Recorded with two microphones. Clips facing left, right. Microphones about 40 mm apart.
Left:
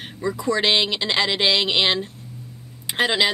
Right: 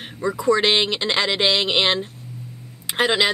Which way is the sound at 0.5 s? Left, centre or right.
Centre.